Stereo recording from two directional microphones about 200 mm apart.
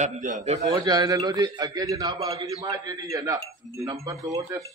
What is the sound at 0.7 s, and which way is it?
A man's voice, 20° right (ahead or behind).